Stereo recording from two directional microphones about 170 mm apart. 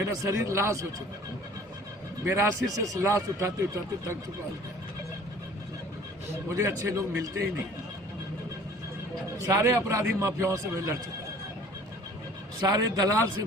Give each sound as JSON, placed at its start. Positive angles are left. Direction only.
{"t": 0.0, "sound": "a man's voice", "side_deg": -15}
{"t": 2.2, "sound": "a man's voice", "side_deg": -15}
{"t": 6.5, "sound": "a man's voice", "side_deg": -15}
{"t": 9.5, "sound": "a man's voice", "side_deg": -15}
{"t": 12.5, "sound": "speech", "side_deg": -20}